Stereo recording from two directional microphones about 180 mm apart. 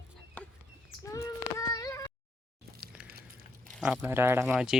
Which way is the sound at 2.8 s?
5° right (ahead or behind).